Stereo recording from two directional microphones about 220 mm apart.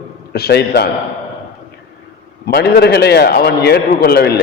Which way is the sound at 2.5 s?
45° left (ahead or behind).